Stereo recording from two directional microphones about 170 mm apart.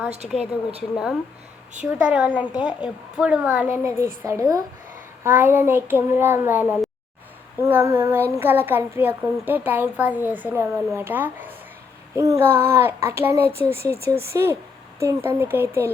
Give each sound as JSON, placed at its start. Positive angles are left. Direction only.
{"t": 0.2, "sound": "a woman's voice", "side_deg": 0}
{"t": 1.8, "sound": "speech", "side_deg": -5}